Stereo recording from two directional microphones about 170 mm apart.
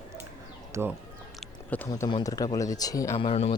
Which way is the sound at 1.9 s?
25° left (ahead or behind).